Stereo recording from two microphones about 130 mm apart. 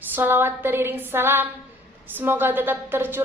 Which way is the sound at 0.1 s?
15° right (ahead or behind).